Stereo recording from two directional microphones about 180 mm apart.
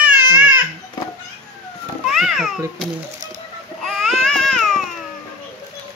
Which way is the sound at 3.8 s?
Centre (ahead or behind).